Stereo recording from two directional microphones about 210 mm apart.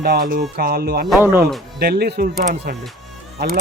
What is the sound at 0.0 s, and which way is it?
Speech, 45° right (ahead or behind).